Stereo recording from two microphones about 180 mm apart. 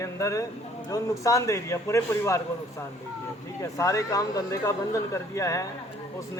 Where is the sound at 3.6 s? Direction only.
15° left (ahead or behind).